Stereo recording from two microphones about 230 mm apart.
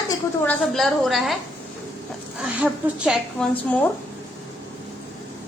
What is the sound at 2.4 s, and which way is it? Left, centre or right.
Speech, centre.